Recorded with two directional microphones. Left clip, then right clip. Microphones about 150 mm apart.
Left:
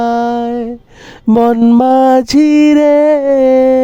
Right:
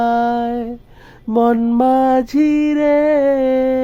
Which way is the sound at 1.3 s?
90° left.